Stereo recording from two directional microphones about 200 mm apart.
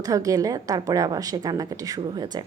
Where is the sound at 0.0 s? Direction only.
15° right (ahead or behind).